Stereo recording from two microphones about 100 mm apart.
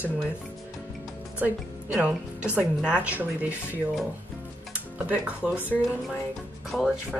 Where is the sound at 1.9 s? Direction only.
15° right (ahead or behind).